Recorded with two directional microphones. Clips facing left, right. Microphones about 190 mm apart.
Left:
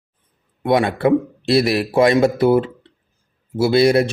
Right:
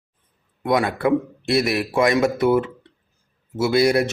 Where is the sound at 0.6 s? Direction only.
25° left (ahead or behind).